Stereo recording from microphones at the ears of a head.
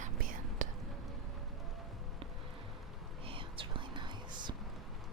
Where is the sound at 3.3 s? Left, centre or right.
Right.